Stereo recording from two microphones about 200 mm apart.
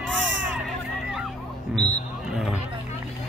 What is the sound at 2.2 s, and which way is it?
Vehicle, centre (ahead or behind).